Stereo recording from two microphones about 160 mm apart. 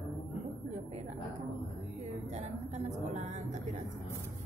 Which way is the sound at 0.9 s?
50° right (ahead or behind).